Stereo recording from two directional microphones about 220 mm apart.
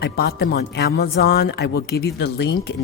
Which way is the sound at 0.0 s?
45° left (ahead or behind).